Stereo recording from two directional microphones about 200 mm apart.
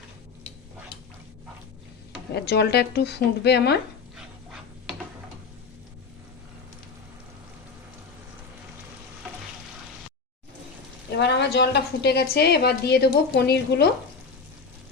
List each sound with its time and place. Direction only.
2.3 s a woman's voice: 55° left (ahead or behind)
11.2 s a woman's voice: 60° left (ahead or behind)